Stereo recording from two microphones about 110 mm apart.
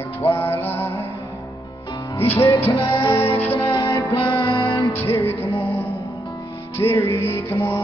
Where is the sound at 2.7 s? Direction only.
45° left (ahead or behind).